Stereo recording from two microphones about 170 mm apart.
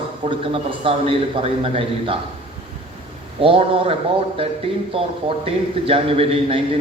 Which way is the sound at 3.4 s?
35° right (ahead or behind).